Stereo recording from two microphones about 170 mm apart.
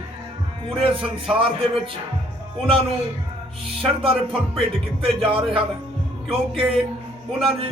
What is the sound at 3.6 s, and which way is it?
Speech, 30° right (ahead or behind).